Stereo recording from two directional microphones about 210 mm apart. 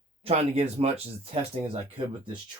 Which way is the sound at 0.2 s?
30° right (ahead or behind).